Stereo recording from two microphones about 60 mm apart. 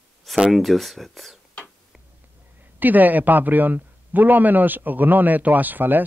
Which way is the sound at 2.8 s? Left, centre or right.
Right.